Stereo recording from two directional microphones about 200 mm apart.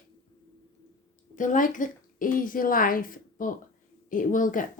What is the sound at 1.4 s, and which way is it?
A woman's voice, 40° left (ahead or behind).